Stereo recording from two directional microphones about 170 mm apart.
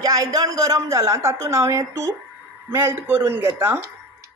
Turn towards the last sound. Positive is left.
turn(degrees=-15)  # may be behind; listen again after turning